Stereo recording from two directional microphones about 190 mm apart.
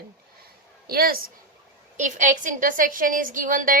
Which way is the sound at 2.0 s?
40° right (ahead or behind).